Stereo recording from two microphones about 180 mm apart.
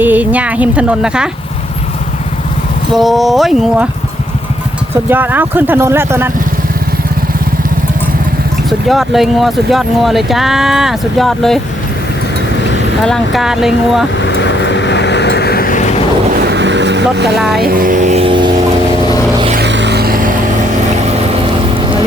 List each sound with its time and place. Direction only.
0.0 s speech: 10° right (ahead or behind)
2.9 s speech: centre (ahead or behind)
5.0 s speech: 10° right (ahead or behind)
8.9 s speech: centre (ahead or behind)
13.0 s speech: centre (ahead or behind)
14.2 s vehicle: 80° left; by 16.0 s 45° left (ahead or behind)
16.3 s vehicle: 65° right (ahead or behind)
17.3 s speech: centre (ahead or behind)
17.6 s speech: 55° right (ahead or behind); by 18.5 s 25° right (ahead or behind)
19.5 s vehicle: 75° right (ahead or behind); by 20.3 s 55° right (ahead or behind)